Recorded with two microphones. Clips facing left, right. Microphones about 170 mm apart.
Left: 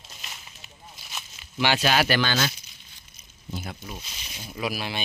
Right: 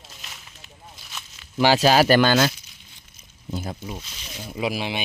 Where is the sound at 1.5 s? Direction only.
40° right (ahead or behind).